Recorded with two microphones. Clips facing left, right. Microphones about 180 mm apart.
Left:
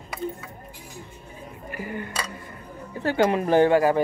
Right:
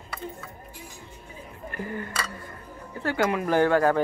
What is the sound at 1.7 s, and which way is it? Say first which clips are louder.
Speech: left 1 dB; 10° left (ahead or behind).